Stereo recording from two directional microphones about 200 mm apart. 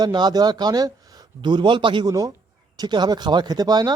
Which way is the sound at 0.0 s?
20° right (ahead or behind).